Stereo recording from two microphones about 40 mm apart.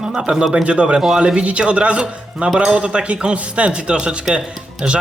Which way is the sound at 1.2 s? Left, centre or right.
Right.